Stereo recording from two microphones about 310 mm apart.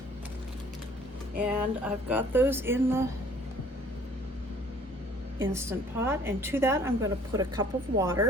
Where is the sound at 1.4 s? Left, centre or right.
Centre.